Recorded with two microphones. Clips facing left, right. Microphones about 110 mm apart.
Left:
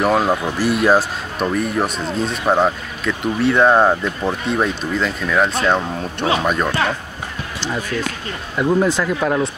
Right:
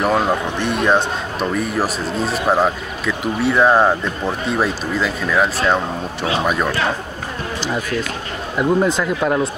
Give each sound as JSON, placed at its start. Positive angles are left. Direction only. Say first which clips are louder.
{"t": 0.0, "sound": "speech", "louder": "left 1 dB", "side_deg": 0}
{"t": 8.5, "sound": "speech", "louder": "even", "side_deg": -5}